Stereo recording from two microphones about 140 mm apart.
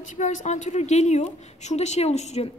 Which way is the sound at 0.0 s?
60° left (ahead or behind).